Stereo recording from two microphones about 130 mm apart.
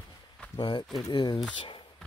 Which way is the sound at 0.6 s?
35° left (ahead or behind).